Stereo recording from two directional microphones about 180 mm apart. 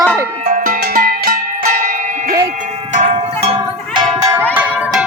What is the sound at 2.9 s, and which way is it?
Music, 40° right (ahead or behind).